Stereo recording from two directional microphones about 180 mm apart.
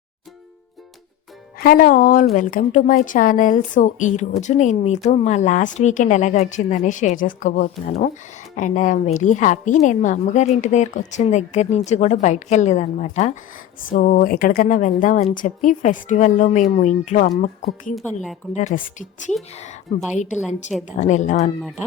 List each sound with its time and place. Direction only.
1.5 s a woman's voice: 55° left (ahead or behind)
20.5 s a woman's voice: 40° left (ahead or behind)